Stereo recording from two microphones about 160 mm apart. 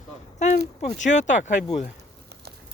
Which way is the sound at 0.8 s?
50° left (ahead or behind).